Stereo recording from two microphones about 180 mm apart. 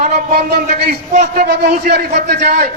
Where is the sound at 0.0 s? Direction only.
40° right (ahead or behind).